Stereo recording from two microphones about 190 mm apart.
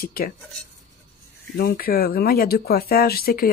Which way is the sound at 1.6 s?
55° left (ahead or behind).